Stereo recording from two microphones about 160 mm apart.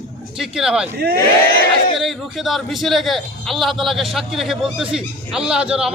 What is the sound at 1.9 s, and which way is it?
A man's voice, centre (ahead or behind).